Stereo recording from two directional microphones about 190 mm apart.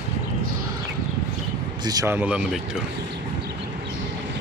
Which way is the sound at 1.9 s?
15° right (ahead or behind).